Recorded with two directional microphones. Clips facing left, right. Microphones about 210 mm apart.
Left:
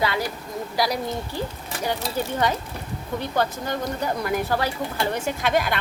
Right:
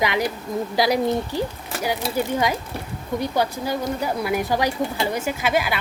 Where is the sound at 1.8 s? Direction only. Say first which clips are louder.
Right 3 dB; 10° right (ahead or behind).